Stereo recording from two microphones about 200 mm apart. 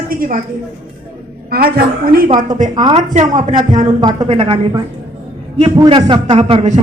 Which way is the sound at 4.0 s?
25° right (ahead or behind).